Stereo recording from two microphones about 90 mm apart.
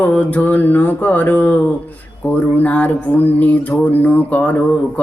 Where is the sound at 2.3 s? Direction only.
15° left (ahead or behind).